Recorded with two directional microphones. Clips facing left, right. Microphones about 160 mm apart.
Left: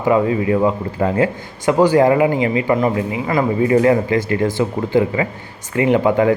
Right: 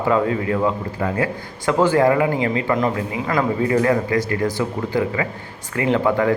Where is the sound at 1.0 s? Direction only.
25° left (ahead or behind).